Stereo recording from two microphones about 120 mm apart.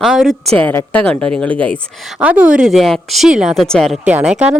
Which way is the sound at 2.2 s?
10° right (ahead or behind).